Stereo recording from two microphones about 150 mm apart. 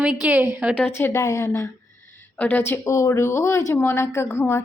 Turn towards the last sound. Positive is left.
turn(degrees=15)  # may be behind; listen again after turning